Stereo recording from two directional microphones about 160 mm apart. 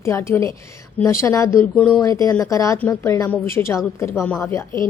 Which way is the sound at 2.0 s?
20° left (ahead or behind).